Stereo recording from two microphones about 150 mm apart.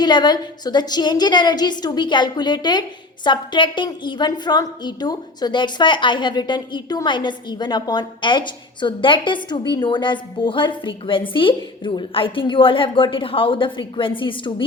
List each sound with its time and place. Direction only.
0.0 s a woman's voice: 30° left (ahead or behind)